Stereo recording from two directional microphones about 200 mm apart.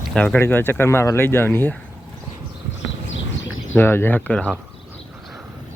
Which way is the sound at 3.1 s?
75° left (ahead or behind).